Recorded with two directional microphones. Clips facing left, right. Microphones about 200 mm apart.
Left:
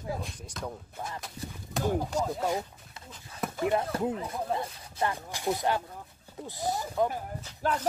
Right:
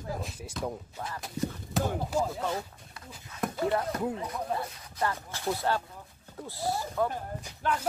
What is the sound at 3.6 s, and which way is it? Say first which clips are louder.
Speech: left 2 dB; 20° left (ahead or behind).